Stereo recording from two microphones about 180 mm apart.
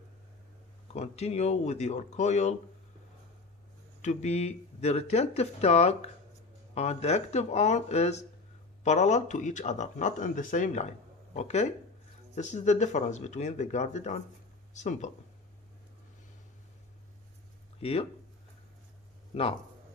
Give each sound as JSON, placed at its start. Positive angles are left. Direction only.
{"t": 0.9, "sound": "speech", "side_deg": 35}
{"t": 4.0, "sound": "speech", "side_deg": 40}
{"t": 17.7, "sound": "speech", "side_deg": 35}